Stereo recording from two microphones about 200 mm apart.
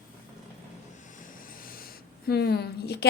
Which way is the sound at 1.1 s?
40° left (ahead or behind).